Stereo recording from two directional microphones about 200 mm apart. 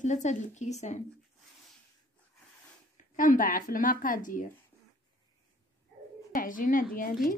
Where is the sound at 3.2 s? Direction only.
40° left (ahead or behind).